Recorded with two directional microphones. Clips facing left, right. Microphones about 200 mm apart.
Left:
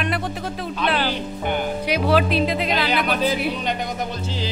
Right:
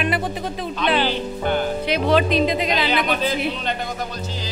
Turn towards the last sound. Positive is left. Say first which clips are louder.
# left 1 dB
turn(degrees=10)  # may be behind; listen again after turning